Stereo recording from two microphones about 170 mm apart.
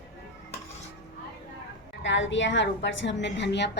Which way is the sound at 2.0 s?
90° left.